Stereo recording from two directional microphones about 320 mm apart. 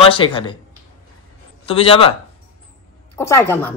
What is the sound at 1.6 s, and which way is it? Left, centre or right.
Speech, centre.